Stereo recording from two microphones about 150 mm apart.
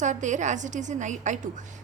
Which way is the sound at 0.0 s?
55° right (ahead or behind).